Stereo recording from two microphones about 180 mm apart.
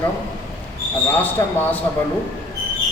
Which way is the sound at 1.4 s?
15° left (ahead or behind).